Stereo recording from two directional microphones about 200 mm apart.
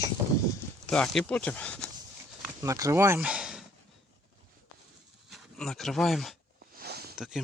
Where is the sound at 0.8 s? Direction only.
5° left (ahead or behind).